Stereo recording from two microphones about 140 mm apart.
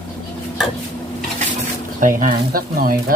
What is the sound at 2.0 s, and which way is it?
Speech, 75° right (ahead or behind).